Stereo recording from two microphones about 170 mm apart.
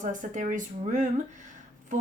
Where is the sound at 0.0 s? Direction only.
50° right (ahead or behind).